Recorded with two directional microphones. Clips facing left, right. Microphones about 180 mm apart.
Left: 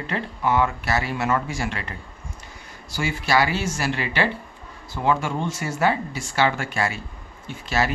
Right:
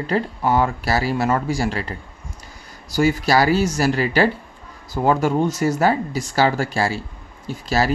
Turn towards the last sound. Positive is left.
turn(degrees=-35)  # may be behind; listen again after turning